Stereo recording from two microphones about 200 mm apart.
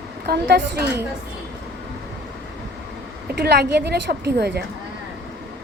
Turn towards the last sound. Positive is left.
turn(degrees=-55)  # may be behind; listen again after turning